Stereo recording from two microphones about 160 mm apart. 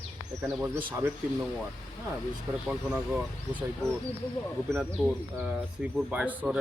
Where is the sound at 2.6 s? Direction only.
5° right (ahead or behind).